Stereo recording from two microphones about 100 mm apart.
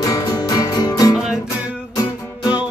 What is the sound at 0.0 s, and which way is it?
Music, 35° left (ahead or behind).